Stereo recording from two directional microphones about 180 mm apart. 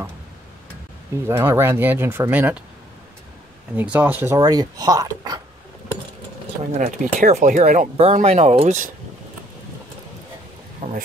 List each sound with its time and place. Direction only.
1.2 s speech: 15° right (ahead or behind)
3.7 s speech: 10° right (ahead or behind)
4.4 s speech: 20° right (ahead or behind)
6.8 s speech: 40° right (ahead or behind)
10.8 s speech: 50° right (ahead or behind)